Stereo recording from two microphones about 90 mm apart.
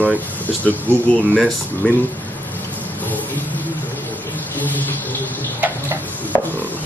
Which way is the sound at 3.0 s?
20° left (ahead or behind).